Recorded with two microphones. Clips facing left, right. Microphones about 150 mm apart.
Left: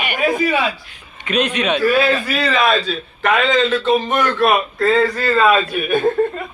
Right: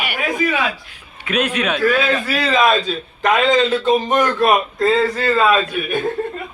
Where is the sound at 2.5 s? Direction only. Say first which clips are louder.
Right 1 dB; 15° right (ahead or behind).